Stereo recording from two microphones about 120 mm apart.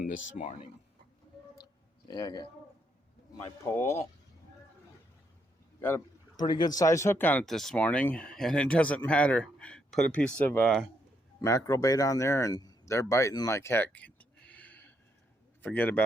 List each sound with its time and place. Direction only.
0.4 s speech: 90° left
2.0 s speech: 35° left (ahead or behind)
3.6 s speech: 20° left (ahead or behind)
6.3 s speech: 40° left (ahead or behind); by 7.4 s 15° left (ahead or behind)
7.4 s speech: centre (ahead or behind)
11.3 s a man's voice: 25° left (ahead or behind)